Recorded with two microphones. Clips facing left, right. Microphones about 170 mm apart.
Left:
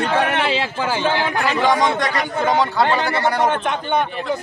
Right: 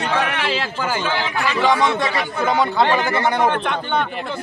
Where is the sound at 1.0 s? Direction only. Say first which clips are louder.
Left 3 dB; 55° left (ahead or behind).